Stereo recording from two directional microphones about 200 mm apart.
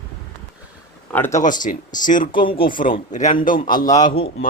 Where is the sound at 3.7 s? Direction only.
20° left (ahead or behind).